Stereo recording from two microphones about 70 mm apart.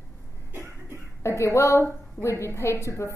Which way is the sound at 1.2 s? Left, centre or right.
Left.